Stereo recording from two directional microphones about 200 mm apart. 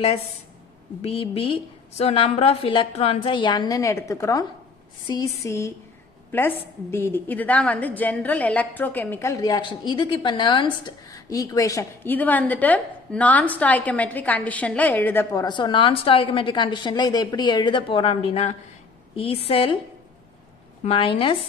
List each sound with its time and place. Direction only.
1.0 s a woman's voice: 30° left (ahead or behind)
20.8 s a woman's voice: 25° left (ahead or behind)